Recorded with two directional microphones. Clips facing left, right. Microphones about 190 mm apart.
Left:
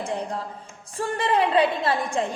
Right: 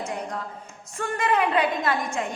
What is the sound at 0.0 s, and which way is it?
A woman's voice, 30° left (ahead or behind).